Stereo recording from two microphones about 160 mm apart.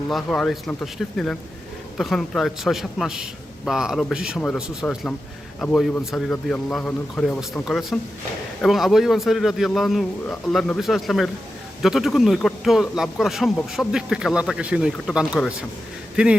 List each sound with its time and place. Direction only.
0.1 s a man's voice: centre (ahead or behind)